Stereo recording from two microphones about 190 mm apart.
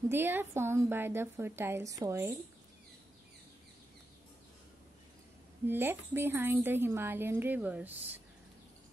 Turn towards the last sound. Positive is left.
turn(degrees=-10)  # may be behind; listen again after turning